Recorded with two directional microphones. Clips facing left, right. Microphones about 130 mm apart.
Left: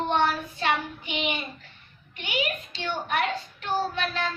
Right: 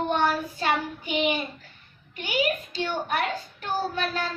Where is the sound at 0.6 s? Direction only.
40° right (ahead or behind).